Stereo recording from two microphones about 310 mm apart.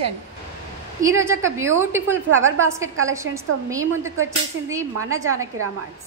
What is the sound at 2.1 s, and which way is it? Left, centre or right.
Speech, right.